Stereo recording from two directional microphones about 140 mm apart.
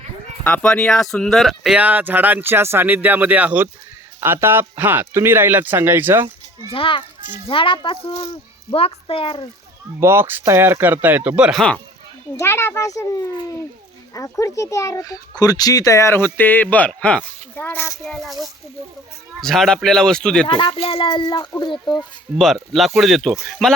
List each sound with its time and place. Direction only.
0.4 s speech: 5° left (ahead or behind); by 6.3 s 15° right (ahead or behind)
6.7 s speech: 40° left (ahead or behind)
10.0 s speech: 15° right (ahead or behind)
12.4 s a child's voice: 20° left (ahead or behind)
14.1 s a child's voice: 20° left (ahead or behind)
18.0 s speech: centre (ahead or behind)
19.4 s speech: centre (ahead or behind)
20.5 s speech: 35° left (ahead or behind)
20.7 s a child's voice: 45° left (ahead or behind); by 22.0 s 30° left (ahead or behind)
22.4 s speech: centre (ahead or behind)